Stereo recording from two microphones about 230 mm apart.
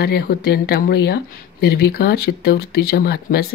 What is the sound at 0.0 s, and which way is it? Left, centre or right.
A woman's voice, left.